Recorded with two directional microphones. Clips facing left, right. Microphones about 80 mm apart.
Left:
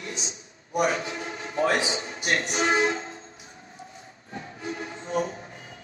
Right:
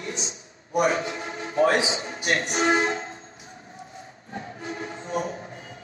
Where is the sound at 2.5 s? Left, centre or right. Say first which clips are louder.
Right 1 dB; right.